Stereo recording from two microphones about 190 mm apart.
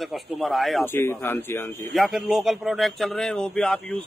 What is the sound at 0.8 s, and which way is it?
Speech, 10° left (ahead or behind).